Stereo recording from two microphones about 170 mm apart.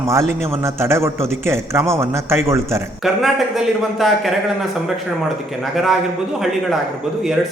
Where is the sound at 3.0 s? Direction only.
Centre (ahead or behind).